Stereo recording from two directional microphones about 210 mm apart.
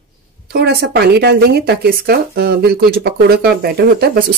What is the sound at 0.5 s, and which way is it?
Speech, 50° right (ahead or behind).